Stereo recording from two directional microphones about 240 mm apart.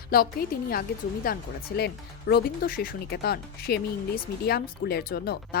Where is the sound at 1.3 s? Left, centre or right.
Left.